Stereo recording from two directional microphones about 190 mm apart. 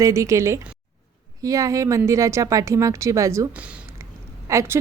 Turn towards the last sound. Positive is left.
turn(degrees=-15)  # may be behind; listen again after turning